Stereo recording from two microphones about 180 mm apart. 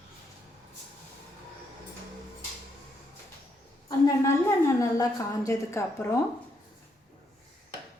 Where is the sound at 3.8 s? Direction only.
20° left (ahead or behind).